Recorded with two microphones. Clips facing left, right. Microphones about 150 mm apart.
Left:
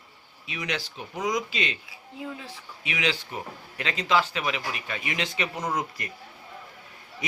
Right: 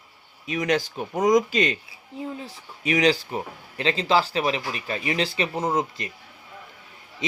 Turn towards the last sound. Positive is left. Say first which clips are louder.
# right 5 dB
turn(degrees=-25)  # may be behind; listen again after turning